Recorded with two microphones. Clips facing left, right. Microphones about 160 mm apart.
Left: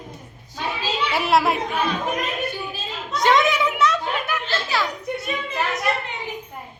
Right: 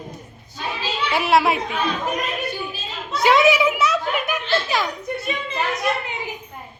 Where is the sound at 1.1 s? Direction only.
Centre (ahead or behind).